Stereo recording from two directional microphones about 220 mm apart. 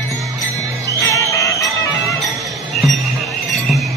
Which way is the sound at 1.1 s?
15° left (ahead or behind).